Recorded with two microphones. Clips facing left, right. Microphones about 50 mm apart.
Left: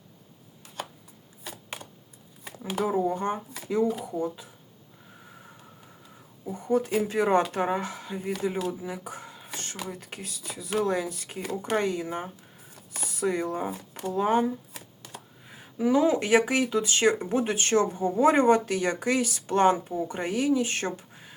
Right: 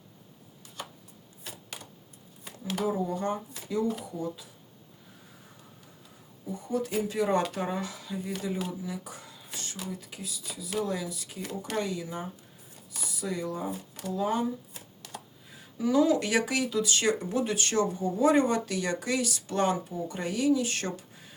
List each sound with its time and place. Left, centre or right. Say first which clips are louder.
2.7 s speech: left 4 dB; left
6.4 s speech: left 5 dB; left
8.8 s a sound: left 2 dB; left
9.9 s speech: even; left
15.4 s speech: left 4 dB; left